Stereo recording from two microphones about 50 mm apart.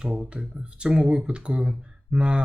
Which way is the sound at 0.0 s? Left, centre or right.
Centre.